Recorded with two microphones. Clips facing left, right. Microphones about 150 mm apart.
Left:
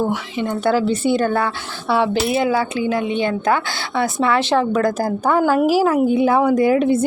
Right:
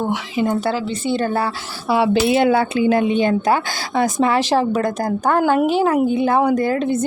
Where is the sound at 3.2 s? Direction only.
40° right (ahead or behind).